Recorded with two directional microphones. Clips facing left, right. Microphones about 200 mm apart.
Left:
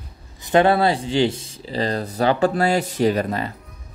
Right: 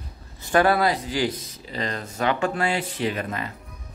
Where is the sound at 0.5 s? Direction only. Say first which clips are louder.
Left 3 dB; 25° left (ahead or behind).